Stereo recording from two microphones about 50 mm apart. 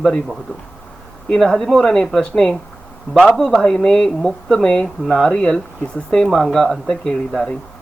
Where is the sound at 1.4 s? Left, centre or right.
Centre.